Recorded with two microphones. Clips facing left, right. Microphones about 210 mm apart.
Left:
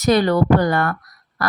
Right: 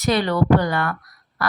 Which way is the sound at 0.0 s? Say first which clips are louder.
Left 4 dB; 45° left (ahead or behind).